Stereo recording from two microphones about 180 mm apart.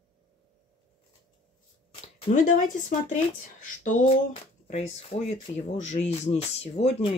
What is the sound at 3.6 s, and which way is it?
Speech, 45° left (ahead or behind).